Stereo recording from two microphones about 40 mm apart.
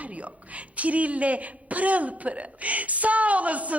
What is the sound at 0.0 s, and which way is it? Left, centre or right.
A woman's voice, right.